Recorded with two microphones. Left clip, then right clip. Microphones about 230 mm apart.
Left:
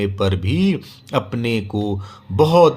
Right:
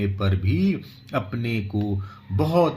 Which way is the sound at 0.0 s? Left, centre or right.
Left.